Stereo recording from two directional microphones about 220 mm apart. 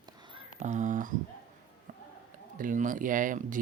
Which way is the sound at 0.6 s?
35° right (ahead or behind).